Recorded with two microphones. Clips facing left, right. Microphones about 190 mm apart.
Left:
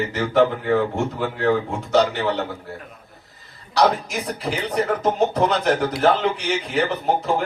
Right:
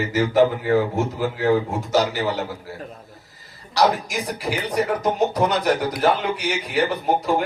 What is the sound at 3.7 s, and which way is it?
Speech, 10° right (ahead or behind).